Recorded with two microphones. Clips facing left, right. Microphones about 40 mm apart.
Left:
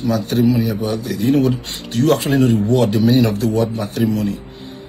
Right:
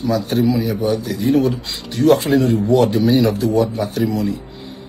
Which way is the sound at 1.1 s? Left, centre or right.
Left.